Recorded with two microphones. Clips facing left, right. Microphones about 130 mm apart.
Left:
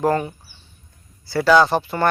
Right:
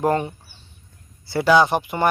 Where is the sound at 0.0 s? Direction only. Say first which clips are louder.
Left 1 dB; 25° right (ahead or behind).